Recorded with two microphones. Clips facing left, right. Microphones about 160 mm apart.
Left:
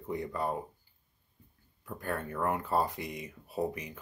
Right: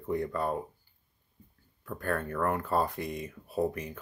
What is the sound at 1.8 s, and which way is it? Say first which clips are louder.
Speech: right 4 dB; 15° left (ahead or behind).